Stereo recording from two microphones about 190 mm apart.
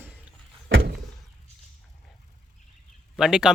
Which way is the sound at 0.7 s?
65° right (ahead or behind).